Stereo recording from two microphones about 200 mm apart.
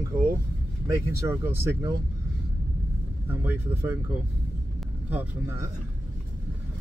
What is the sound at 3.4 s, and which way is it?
Speech, 10° right (ahead or behind).